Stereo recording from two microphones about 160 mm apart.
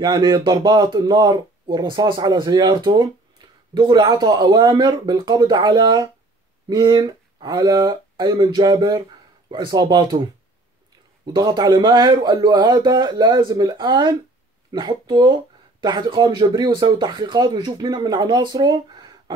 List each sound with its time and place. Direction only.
0.0 s speech: 25° right (ahead or behind)
11.3 s speech: 25° right (ahead or behind)